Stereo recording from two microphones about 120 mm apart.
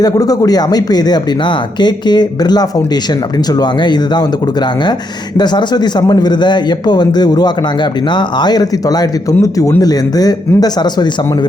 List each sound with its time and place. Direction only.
0.0 s speech: 30° left (ahead or behind)